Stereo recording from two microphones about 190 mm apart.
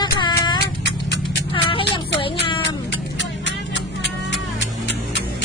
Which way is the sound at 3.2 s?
70° left (ahead or behind).